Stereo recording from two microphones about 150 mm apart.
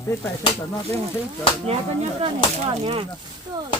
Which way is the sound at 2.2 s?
40° right (ahead or behind).